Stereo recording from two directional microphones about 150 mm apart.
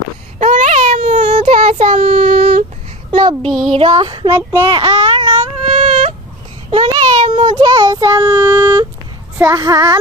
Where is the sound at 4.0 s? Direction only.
30° right (ahead or behind).